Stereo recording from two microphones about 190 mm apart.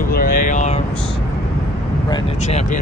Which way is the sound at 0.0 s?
50° left (ahead or behind).